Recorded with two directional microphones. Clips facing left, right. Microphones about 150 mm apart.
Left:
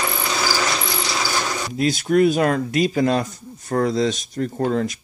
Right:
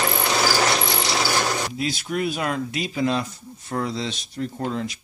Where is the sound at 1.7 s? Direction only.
45° left (ahead or behind).